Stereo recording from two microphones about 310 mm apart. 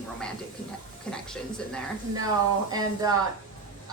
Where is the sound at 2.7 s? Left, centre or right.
Centre.